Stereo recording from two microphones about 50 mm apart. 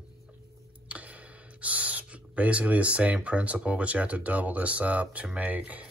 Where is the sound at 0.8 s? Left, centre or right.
Right.